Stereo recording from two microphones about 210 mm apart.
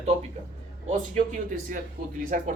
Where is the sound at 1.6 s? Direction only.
40° right (ahead or behind).